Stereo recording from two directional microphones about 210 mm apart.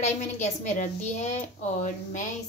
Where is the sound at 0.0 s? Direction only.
35° left (ahead or behind).